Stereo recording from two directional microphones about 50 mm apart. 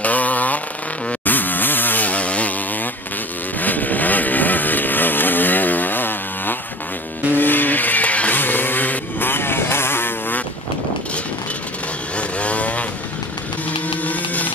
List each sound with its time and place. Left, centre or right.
0.0 s vehicle: left
1.2 s chainsaw: left
3.5 s vehicle: left
8.4 s vehicle: left
12.2 s vehicle: left
13.7 s printer: left